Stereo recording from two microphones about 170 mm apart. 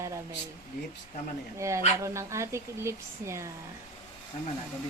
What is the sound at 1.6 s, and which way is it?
Speech, 15° right (ahead or behind).